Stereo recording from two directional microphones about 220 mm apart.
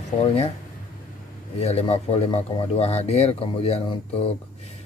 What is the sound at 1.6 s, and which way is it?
Speech, 30° left (ahead or behind).